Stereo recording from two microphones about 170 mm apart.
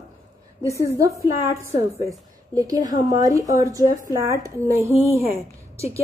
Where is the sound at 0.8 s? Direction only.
20° right (ahead or behind).